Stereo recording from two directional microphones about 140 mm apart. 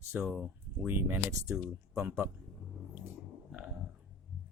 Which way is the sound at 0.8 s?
15° right (ahead or behind).